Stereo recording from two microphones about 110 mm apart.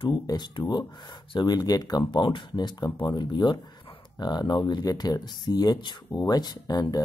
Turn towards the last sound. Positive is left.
turn(degrees=35)  # may be behind; listen again after turning